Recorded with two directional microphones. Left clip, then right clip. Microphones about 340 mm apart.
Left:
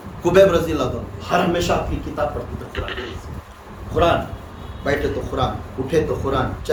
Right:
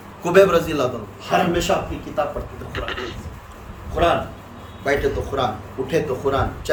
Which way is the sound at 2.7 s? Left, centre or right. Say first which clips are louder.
Right 1 dB; centre.